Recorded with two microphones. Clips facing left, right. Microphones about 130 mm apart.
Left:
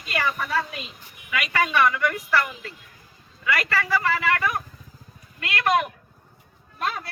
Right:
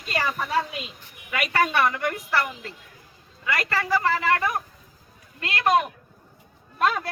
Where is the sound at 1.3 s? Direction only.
45° right (ahead or behind); by 5.8 s 25° right (ahead or behind).